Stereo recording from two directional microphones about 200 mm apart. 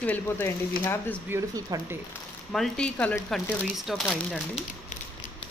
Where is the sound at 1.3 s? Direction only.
15° right (ahead or behind).